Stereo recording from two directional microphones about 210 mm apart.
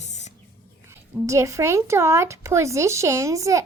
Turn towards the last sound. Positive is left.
turn(degrees=-15)  # may be behind; listen again after turning